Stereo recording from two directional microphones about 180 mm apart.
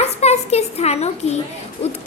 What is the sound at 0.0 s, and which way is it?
A woman's voice, 35° left (ahead or behind).